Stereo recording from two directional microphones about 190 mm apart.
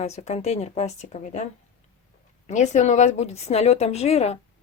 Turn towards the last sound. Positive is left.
turn(degrees=35)  # may be behind; listen again after turning